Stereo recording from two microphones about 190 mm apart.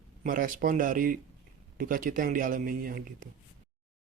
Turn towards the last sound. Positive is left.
turn(degrees=-45)  # may be behind; listen again after turning